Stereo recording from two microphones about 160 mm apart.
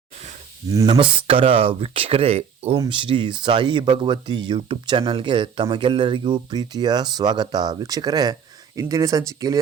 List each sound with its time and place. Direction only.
0.9 s speech: 30° right (ahead or behind)